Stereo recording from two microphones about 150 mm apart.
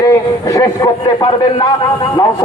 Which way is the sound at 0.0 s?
20° left (ahead or behind).